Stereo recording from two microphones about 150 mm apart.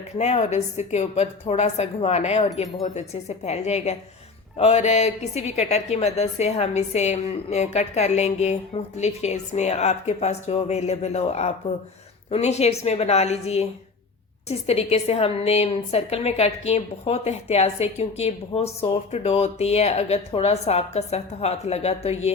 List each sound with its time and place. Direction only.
0.2 s a woman's voice: 45° left (ahead or behind)